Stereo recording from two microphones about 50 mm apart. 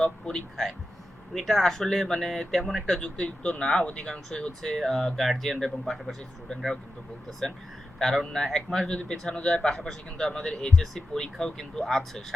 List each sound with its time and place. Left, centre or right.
0.0 s speech: centre
2.8 s speech: centre
3.6 s speech: centre
9.6 s speech: centre